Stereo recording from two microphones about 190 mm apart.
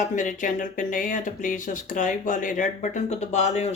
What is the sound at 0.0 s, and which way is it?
Speech, 40° left (ahead or behind).